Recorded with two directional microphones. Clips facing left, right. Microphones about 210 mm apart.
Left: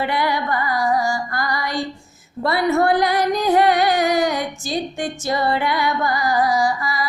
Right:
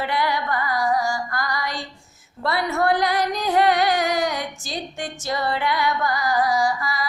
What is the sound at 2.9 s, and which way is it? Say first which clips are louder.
Speech: left 3 dB; 50° left (ahead or behind).